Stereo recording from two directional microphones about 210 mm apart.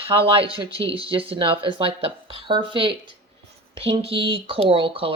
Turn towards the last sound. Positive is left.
turn(degrees=-25)  # may be behind; listen again after turning